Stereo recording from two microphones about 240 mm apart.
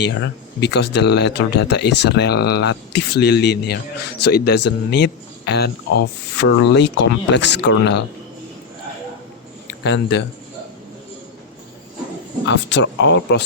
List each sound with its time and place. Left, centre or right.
0.1 s speech: left
9.6 s speech: left
12.5 s speech: left